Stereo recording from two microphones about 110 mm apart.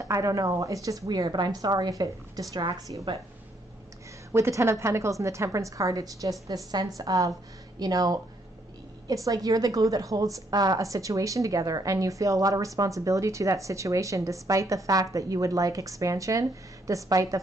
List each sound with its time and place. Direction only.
0.0 s a woman's voice: 30° right (ahead or behind)
4.3 s a woman's voice: 25° right (ahead or behind)